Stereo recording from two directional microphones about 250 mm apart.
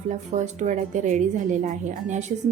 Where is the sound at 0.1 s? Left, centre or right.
Right.